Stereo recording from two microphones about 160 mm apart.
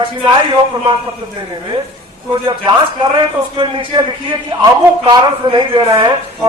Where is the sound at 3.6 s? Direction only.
30° right (ahead or behind).